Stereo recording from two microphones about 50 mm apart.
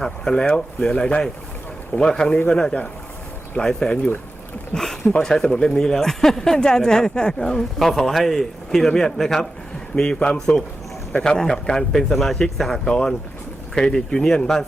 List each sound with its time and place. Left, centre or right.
0.0 s speech: centre
4.7 s speech: centre
7.8 s a man's voice: centre
9.9 s a man's voice: centre
12.9 s speech: centre